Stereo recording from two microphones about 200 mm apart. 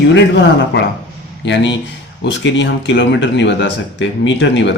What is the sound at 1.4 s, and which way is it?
Speech, 65° left (ahead or behind).